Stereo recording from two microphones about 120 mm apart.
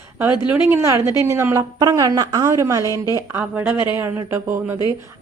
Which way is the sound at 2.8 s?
30° left (ahead or behind).